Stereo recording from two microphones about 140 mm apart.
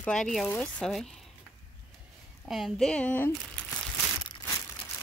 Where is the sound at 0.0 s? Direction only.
5° left (ahead or behind).